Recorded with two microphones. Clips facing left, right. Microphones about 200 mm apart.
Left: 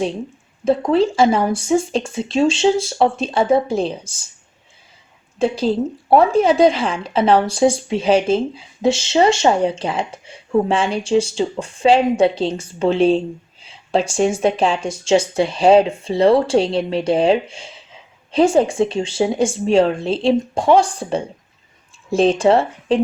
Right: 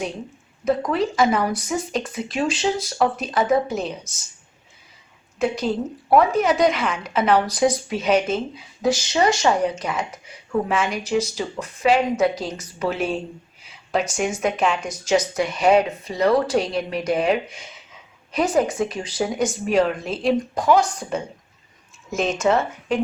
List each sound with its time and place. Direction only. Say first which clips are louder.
0.6 s a woman's voice: left 6 dB; 30° left (ahead or behind)
5.4 s a woman's voice: left 5 dB; 30° left (ahead or behind)